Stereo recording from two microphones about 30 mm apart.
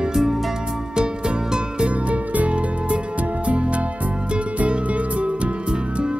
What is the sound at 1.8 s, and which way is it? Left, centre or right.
Music, right.